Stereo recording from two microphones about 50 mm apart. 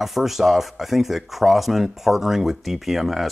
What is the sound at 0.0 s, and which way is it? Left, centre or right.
Speech, centre.